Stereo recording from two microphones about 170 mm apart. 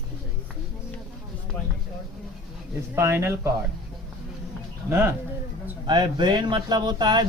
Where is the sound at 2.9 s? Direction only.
15° right (ahead or behind).